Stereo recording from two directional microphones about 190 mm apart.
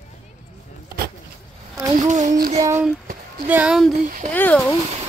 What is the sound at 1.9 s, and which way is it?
Speech, 40° right (ahead or behind).